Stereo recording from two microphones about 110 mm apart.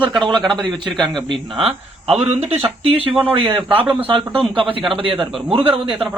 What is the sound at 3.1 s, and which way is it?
Speech, 15° right (ahead or behind).